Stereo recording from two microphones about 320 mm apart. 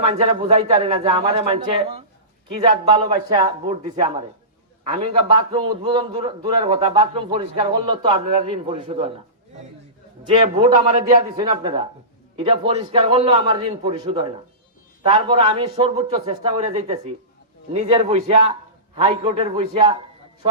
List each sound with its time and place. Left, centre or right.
0.0 s a man's voice: centre
5.1 s a man's voice: centre
10.5 s a man's voice: centre